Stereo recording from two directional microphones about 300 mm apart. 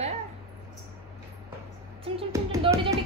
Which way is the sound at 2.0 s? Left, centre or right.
Centre.